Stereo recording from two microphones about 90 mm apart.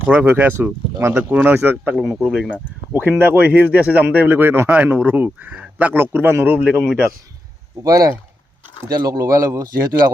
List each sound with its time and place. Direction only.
0.1 s speech: 15° right (ahead or behind)
2.0 s speech: 5° right (ahead or behind)
2.9 s speech: 20° right (ahead or behind)
7.9 s speech: 40° right (ahead or behind)